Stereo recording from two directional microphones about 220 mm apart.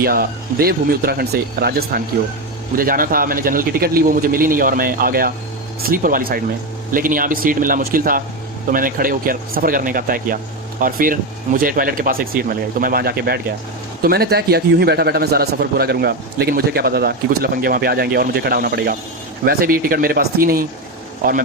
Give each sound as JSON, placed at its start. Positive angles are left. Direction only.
{"t": 0.0, "sound": "a man's voice", "side_deg": -40}